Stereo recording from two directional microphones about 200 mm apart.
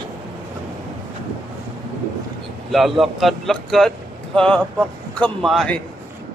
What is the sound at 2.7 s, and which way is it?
Speech, centre (ahead or behind).